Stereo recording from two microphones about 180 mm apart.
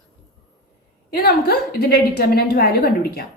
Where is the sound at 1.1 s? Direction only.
60° left (ahead or behind).